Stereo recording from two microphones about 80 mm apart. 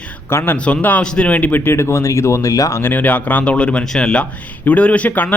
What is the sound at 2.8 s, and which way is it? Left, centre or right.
Speech, left.